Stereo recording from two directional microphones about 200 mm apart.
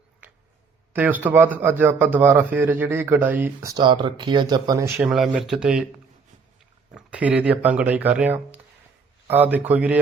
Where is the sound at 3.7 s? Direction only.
25° right (ahead or behind).